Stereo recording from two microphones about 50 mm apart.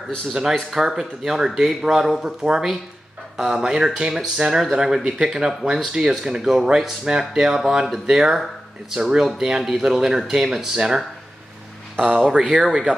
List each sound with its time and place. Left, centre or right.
0.3 s speech: centre
12.3 s speech: centre